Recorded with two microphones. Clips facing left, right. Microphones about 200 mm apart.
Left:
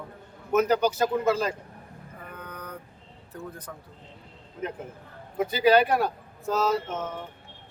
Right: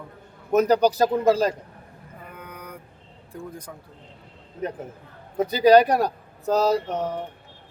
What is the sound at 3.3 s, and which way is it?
Speech, 10° right (ahead or behind).